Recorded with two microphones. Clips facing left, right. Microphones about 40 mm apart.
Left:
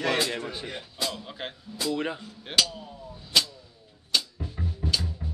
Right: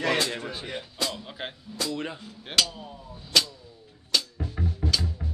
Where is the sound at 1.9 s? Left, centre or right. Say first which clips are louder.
Left 6 dB; centre.